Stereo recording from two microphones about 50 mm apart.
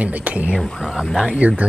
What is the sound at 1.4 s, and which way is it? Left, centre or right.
Speech, right.